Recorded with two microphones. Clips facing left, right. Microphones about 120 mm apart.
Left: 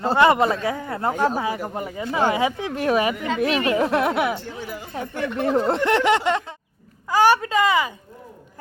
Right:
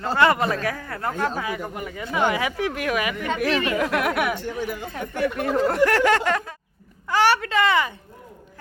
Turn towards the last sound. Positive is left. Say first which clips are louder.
# left 1 dB
turn(degrees=10)  # may be behind; listen again after turning